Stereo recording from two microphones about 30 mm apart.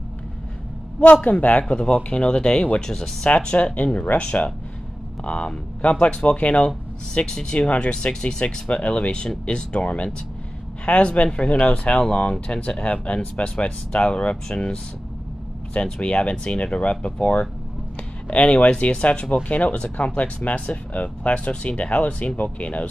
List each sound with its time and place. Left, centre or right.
1.2 s speech: left
1.7 s speech: left
3.7 s speech: left
5.2 s speech: left
7.2 s speech: left
8.8 s speech: left
9.5 s speech: left
18.3 s speech: left